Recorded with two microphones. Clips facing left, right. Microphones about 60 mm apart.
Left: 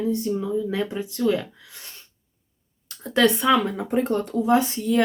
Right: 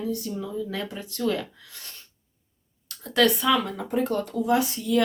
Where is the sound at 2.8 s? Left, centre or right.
Left.